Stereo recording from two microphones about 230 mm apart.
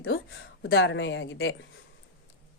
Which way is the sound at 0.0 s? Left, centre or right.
Left.